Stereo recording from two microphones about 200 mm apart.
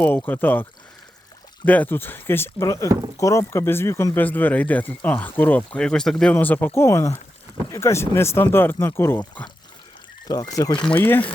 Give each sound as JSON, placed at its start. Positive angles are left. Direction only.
{"t": 0.0, "sound": "speech", "side_deg": 10}
{"t": 10.8, "sound": "speech", "side_deg": 5}